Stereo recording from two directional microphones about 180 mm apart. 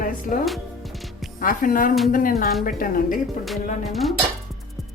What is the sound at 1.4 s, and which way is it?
A woman's voice, 50° left (ahead or behind).